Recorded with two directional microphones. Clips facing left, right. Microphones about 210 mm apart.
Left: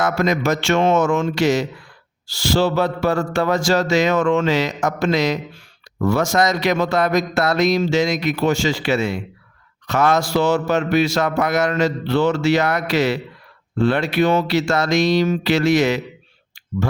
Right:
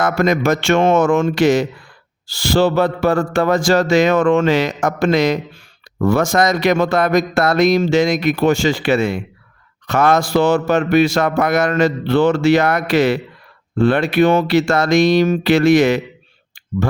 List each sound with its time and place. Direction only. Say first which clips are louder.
0.0 s a man's voice: right 3 dB; 50° right (ahead or behind)